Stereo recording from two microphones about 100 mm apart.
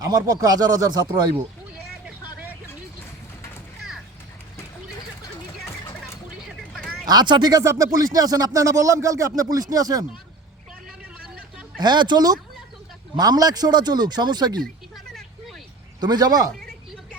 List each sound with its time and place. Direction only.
0.0 s speech: 35° right (ahead or behind)
3.8 s a sound: centre (ahead or behind)
5.6 s music: 25° left (ahead or behind)
6.4 s a sound: centre (ahead or behind)
7.0 s speech: 45° right (ahead or behind)
7.5 s speech: 30° right (ahead or behind)
11.8 s speech: 50° right (ahead or behind)
15.0 s vehicle: 5° left (ahead or behind)
16.0 s speech: 45° right (ahead or behind)